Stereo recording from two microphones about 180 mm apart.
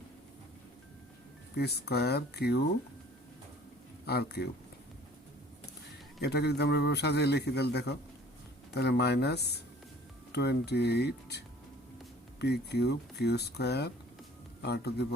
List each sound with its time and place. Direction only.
1.5 s speech: 65° left (ahead or behind)
4.0 s speech: 65° left (ahead or behind)
6.2 s a man's voice: 65° left (ahead or behind)